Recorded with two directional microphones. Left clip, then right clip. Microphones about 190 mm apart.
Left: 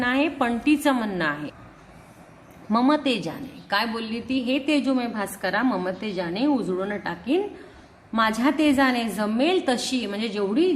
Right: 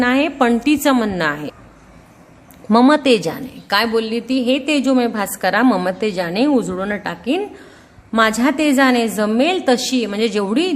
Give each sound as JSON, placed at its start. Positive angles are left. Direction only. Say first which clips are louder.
{"t": 0.0, "sound": "a woman's voice", "louder": "right 7 dB", "side_deg": -30}
{"t": 2.6, "sound": "a woman's voice", "louder": "right 9 dB", "side_deg": -30}
{"t": 10.5, "sound": "speech", "louder": "right 3 dB", "side_deg": -45}